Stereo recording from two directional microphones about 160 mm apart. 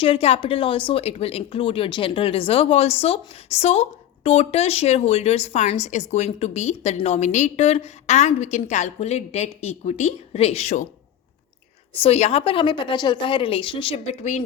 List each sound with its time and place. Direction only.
0.0 s speech: 35° left (ahead or behind)
11.9 s speech: 40° left (ahead or behind)